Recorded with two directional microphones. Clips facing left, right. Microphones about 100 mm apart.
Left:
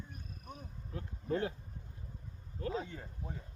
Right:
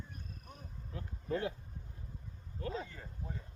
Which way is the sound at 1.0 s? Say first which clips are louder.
Left 2 dB; 35° left (ahead or behind).